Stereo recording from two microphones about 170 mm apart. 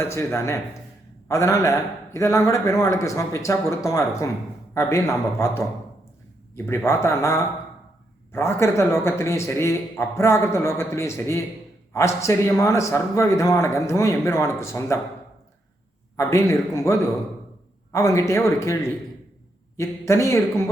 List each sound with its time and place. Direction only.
0.0 s a man's voice: 15° left (ahead or behind)
6.7 s speech: 15° left (ahead or behind)
16.1 s speech: 15° left (ahead or behind)